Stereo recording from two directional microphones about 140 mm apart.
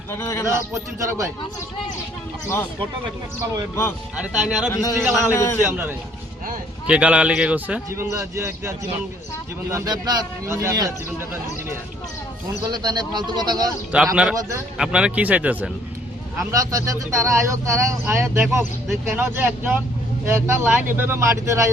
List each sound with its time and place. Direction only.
0.1 s a man's voice: 20° left (ahead or behind)
0.4 s speech: 20° right (ahead or behind)
4.2 s speech: 5° right (ahead or behind)
4.7 s a man's voice: 25° left (ahead or behind)
5.6 s speech: 10° right (ahead or behind)
8.1 s speech: 20° right (ahead or behind)
9.7 s speech: 30° right (ahead or behind)
12.7 s speech: 30° right (ahead or behind)
13.9 s a man's voice: 5° right (ahead or behind)
16.4 s speech: 25° right (ahead or behind)